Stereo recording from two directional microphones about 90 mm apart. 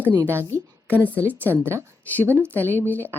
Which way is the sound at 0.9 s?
20° right (ahead or behind).